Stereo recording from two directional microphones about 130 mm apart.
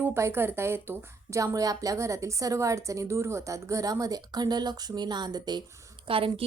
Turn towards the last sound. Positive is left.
turn(degrees=-45)  # may be behind; listen again after turning